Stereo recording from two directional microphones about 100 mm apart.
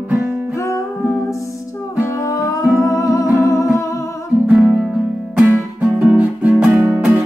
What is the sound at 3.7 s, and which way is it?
Humming, 30° left (ahead or behind).